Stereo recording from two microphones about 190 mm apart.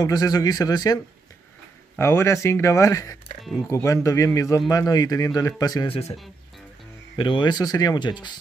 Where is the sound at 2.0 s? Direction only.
15° left (ahead or behind).